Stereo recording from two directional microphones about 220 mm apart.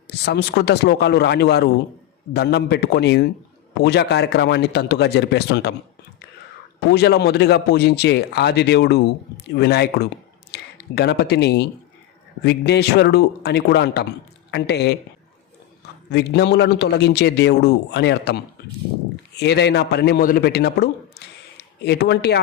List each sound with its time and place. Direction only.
0.1 s a man's voice: 50° left (ahead or behind)
6.7 s a man's voice: 45° left (ahead or behind)
16.1 s a man's voice: 50° left (ahead or behind)